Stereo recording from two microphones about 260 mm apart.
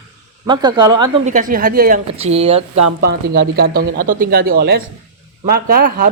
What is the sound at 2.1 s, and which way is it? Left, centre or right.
Speech, right.